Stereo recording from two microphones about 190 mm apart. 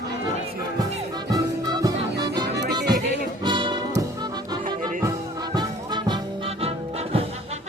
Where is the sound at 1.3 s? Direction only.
20° right (ahead or behind).